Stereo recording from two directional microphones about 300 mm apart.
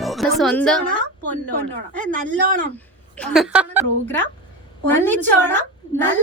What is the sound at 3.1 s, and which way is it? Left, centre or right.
Speech, centre.